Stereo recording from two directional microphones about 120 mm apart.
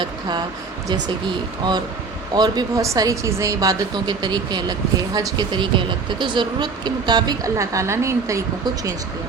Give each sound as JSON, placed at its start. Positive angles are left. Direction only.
{"t": 0.0, "sound": "speech", "side_deg": -35}
{"t": 2.3, "sound": "speech", "side_deg": -35}